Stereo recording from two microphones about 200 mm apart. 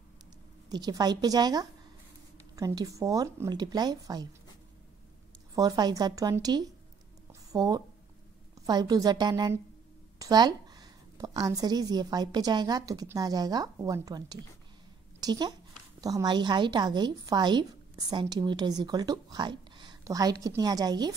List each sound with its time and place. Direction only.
0.7 s a woman's voice: 20° right (ahead or behind)
5.5 s a woman's voice: 20° right (ahead or behind)